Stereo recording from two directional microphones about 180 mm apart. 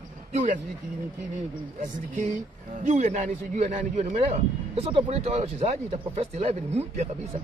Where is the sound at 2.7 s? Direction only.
40° right (ahead or behind).